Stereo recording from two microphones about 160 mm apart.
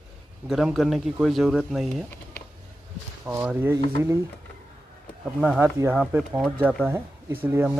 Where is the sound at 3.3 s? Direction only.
15° right (ahead or behind).